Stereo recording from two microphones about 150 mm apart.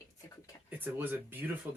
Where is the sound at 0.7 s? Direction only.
15° right (ahead or behind).